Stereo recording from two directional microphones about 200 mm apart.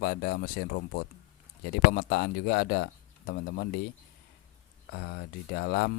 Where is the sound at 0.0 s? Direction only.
55° left (ahead or behind).